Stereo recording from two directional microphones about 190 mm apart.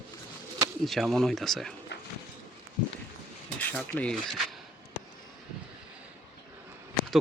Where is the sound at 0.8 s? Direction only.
Centre (ahead or behind).